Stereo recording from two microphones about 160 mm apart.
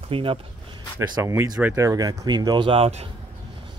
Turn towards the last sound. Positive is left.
turn(degrees=-40)  # may be behind; listen again after turning